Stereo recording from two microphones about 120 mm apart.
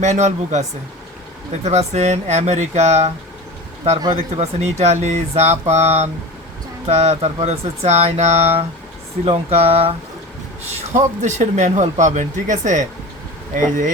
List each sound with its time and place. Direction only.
0.0 s speech: 80° right
1.6 s speech: 65° right (ahead or behind)
4.4 s speech: 70° right (ahead or behind)
10.7 s speech: 80° right